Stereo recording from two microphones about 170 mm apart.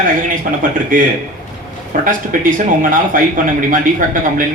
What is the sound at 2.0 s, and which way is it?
Speech, 50° right (ahead or behind).